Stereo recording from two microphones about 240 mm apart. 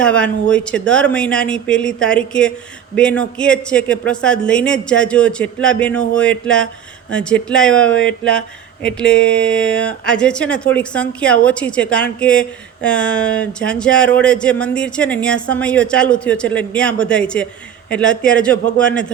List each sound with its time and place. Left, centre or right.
0.0 s speech: centre